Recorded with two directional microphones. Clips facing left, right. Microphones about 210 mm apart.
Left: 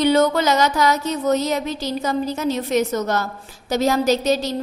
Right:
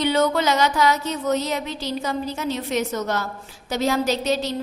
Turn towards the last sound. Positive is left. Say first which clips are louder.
# left 4 dB
turn(degrees=40)  # may be behind; listen again after turning